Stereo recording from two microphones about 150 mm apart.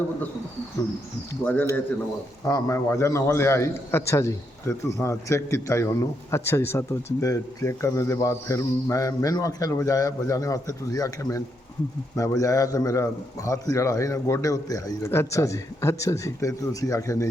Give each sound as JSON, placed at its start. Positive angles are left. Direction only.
{"t": 1.3, "sound": "speech", "side_deg": 10}
{"t": 2.4, "sound": "a man's voice", "side_deg": 20}